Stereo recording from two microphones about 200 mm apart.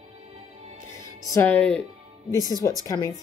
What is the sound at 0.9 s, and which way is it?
Speech, 15° left (ahead or behind).